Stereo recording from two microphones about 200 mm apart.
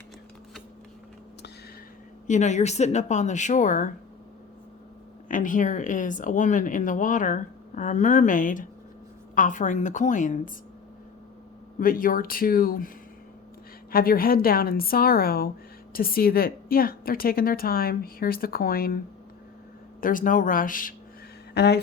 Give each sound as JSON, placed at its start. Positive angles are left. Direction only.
{"t": 2.2, "sound": "speech", "side_deg": 35}
{"t": 5.3, "sound": "speech", "side_deg": 40}
{"t": 11.8, "sound": "a woman's voice", "side_deg": 45}
{"t": 13.9, "sound": "a woman's voice", "side_deg": 45}
{"t": 20.0, "sound": "a woman's voice", "side_deg": 45}
{"t": 21.5, "sound": "speech", "side_deg": 55}